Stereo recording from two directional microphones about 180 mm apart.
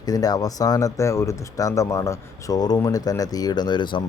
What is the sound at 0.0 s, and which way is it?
Speech, 20° left (ahead or behind).